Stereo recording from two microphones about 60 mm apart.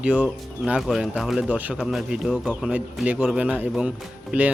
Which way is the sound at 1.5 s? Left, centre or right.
Right.